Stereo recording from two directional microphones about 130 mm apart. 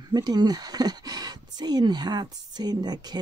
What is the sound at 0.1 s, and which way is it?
Speech, 30° right (ahead or behind).